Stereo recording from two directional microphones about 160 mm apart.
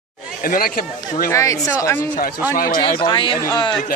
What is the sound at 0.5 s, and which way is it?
Speech, 60° left (ahead or behind).